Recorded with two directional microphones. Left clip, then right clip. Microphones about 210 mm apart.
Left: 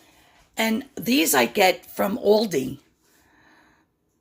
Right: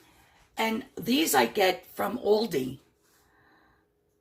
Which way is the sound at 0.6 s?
40° left (ahead or behind).